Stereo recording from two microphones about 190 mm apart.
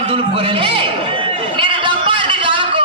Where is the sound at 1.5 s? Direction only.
25° right (ahead or behind).